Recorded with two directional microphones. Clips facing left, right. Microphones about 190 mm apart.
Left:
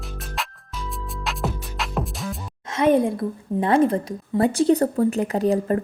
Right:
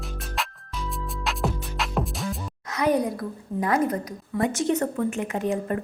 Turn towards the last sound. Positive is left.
turn(degrees=35)  # may be behind; listen again after turning